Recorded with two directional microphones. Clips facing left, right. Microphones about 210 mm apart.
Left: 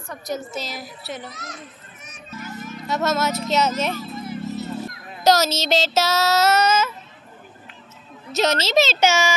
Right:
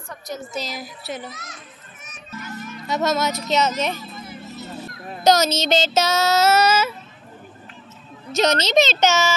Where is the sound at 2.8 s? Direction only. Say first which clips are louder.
Right 1 dB; centre (ahead or behind).